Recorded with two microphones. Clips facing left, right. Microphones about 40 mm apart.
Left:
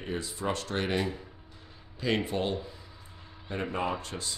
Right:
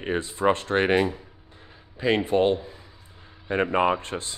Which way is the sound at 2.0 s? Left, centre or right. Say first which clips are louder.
Right 8 dB; right.